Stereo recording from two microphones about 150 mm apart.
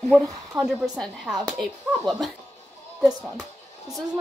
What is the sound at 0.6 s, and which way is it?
Speech, centre (ahead or behind).